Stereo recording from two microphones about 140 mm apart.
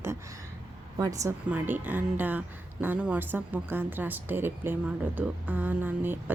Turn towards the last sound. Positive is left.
turn(degrees=-15)  # may be behind; listen again after turning